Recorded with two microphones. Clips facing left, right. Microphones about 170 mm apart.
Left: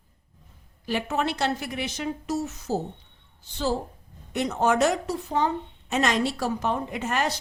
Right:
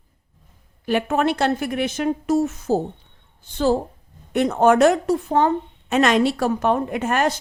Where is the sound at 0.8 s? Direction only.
55° right (ahead or behind).